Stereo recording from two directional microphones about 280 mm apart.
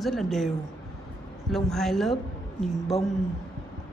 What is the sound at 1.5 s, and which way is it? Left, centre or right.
Speech, centre.